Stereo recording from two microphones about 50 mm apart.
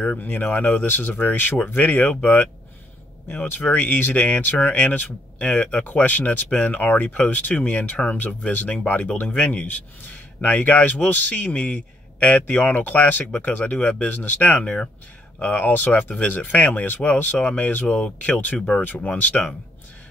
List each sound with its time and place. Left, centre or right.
0.2 s speech: left
3.3 s speech: left
15.6 s speech: left